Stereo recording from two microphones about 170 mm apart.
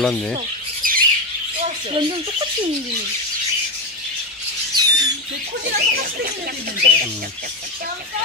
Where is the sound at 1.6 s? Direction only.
30° right (ahead or behind).